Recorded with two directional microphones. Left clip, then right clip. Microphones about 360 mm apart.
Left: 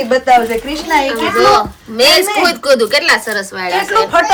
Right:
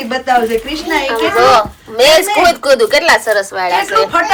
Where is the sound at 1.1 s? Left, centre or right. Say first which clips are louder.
Right 3 dB; centre.